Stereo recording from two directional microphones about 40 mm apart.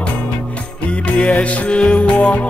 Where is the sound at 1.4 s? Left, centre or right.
Left.